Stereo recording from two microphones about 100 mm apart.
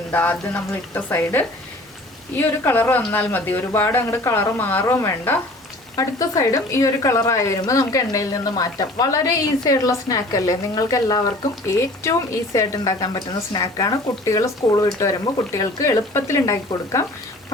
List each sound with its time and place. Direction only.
0.1 s a woman's voice: 15° left (ahead or behind)